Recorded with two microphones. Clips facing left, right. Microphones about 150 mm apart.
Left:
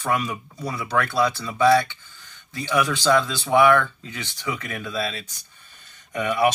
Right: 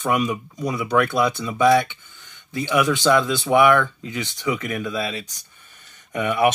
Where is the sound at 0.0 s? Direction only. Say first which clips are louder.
Right 3 dB; 20° right (ahead or behind).